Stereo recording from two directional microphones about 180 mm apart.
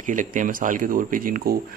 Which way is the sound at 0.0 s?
45° right (ahead or behind).